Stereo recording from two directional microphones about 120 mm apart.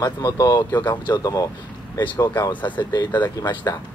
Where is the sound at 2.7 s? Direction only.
40° left (ahead or behind).